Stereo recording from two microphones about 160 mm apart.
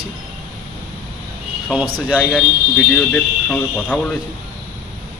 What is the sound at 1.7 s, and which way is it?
Speech, 5° right (ahead or behind).